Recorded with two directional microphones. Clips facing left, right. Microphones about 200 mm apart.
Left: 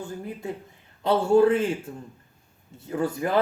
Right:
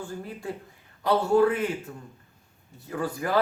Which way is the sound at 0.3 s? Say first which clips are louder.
Left 2 dB; 20° left (ahead or behind).